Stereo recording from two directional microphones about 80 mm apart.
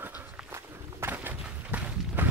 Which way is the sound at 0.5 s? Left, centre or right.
Right.